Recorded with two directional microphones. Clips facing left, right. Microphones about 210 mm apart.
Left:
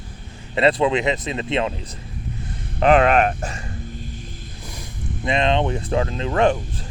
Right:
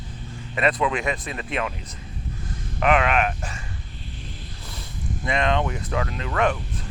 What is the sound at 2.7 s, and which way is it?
Speech, 35° left (ahead or behind).